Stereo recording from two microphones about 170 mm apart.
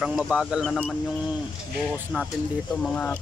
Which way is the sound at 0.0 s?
5° right (ahead or behind).